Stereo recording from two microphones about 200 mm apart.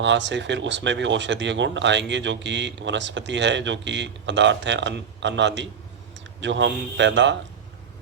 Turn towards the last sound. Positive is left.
turn(degrees=-65)  # may be behind; listen again after turning